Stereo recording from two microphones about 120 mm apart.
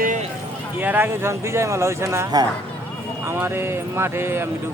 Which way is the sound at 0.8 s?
15° right (ahead or behind).